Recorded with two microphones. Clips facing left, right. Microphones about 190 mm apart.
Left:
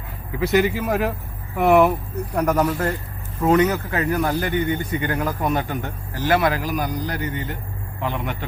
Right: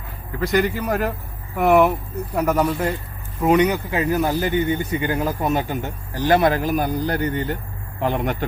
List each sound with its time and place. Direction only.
0.3 s a man's voice: 5° left (ahead or behind); by 6.5 s 20° right (ahead or behind)
6.5 s a man's voice: 50° right (ahead or behind)
6.7 s a man's voice: 30° right (ahead or behind)